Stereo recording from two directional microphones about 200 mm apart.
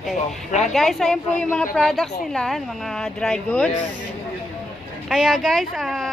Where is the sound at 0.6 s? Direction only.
Centre (ahead or behind).